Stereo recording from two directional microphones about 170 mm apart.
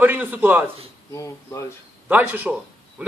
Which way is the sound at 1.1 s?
20° left (ahead or behind).